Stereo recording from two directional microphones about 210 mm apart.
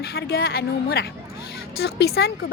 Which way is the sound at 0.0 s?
50° left (ahead or behind).